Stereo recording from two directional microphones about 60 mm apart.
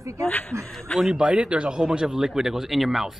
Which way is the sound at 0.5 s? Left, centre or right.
Right.